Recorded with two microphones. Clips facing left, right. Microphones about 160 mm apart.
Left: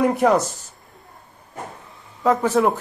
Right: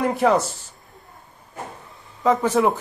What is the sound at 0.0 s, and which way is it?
Speech, centre (ahead or behind).